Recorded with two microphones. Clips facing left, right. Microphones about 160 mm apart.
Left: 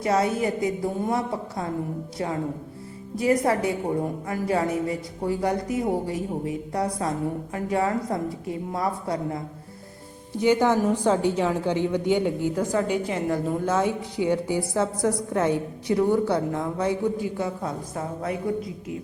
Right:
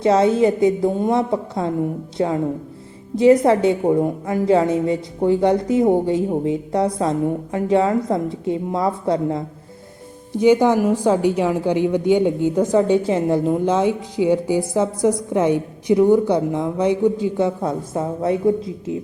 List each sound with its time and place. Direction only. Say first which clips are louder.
0.0 s a woman's voice: right 8 dB; 25° right (ahead or behind)